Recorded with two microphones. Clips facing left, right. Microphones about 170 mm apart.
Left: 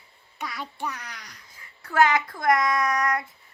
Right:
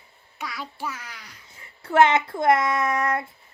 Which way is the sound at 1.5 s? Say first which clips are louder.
Right 4 dB; 25° right (ahead or behind).